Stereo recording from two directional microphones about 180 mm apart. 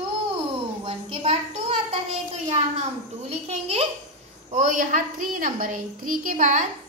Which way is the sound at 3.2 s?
35° right (ahead or behind).